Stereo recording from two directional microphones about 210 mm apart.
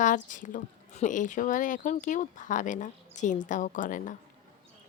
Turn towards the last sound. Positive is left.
turn(degrees=40)  # may be behind; listen again after turning